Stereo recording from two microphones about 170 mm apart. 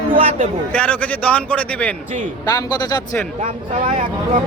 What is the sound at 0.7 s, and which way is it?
A man's voice, 10° left (ahead or behind).